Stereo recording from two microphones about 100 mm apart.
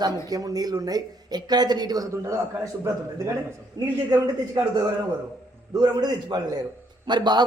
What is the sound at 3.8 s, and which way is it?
Speech, 45° right (ahead or behind).